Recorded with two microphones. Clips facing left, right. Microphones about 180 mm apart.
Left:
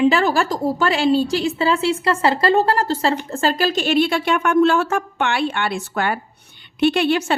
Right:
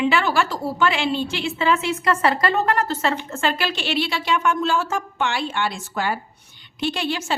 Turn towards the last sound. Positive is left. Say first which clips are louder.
# left 8 dB
turn(degrees=60)  # may be behind; listen again after turning